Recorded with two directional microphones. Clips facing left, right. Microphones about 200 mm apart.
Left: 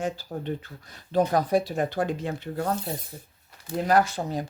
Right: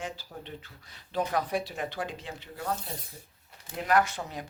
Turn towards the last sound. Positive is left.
turn(degrees=35)  # may be behind; listen again after turning